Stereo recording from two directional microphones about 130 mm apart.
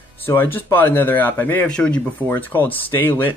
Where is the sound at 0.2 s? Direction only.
15° left (ahead or behind).